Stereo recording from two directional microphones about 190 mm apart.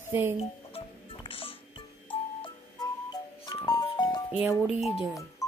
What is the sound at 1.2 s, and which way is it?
Music, 30° left (ahead or behind).